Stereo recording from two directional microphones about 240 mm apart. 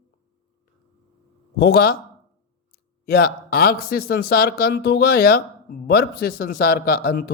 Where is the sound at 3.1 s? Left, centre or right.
Left.